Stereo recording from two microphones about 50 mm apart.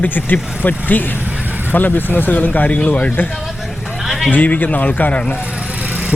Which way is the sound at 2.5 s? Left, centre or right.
Left.